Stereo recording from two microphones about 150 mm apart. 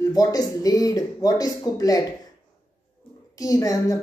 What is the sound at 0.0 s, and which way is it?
A woman's voice, 25° left (ahead or behind).